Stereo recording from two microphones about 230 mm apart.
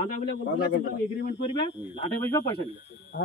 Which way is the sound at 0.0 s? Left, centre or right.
Left.